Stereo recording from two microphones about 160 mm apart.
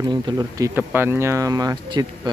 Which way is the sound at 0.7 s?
15° right (ahead or behind).